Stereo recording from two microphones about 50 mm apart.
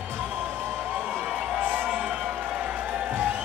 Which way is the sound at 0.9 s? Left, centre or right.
Centre.